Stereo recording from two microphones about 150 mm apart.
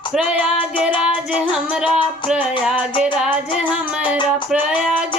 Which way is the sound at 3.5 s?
30° left (ahead or behind).